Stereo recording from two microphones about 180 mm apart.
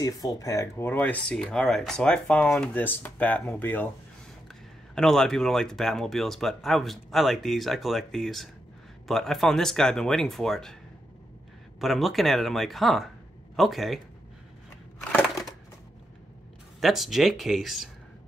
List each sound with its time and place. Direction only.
0.0 s speech: 20° left (ahead or behind)
4.9 s speech: centre (ahead or behind)
11.8 s speech: centre (ahead or behind)
16.8 s speech: centre (ahead or behind)